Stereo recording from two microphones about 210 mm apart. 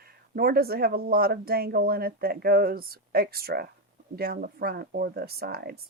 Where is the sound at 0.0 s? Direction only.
45° right (ahead or behind).